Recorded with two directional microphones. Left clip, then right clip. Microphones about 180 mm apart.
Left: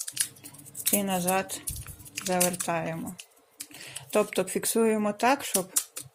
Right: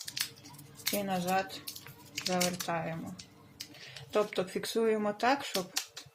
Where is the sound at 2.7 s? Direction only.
45° left (ahead or behind).